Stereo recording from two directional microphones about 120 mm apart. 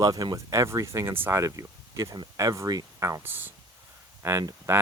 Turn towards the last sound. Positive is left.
turn(degrees=-30)  # may be behind; listen again after turning